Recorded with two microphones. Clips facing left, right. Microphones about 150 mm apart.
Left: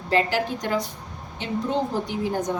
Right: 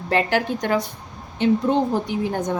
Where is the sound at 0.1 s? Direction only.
60° right (ahead or behind).